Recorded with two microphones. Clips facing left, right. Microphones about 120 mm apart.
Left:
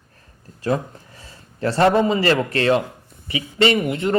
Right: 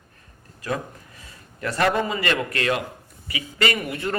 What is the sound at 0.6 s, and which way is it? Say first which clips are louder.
A man's voice: left 6 dB; 30° left (ahead or behind).